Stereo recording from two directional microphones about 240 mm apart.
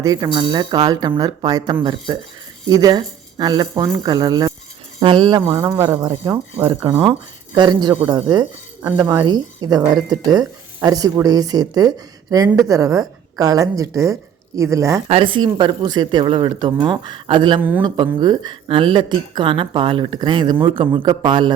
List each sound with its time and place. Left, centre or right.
0.0 s speech: centre
15.0 s speech: right
17.6 s speech: centre
17.9 s speech: centre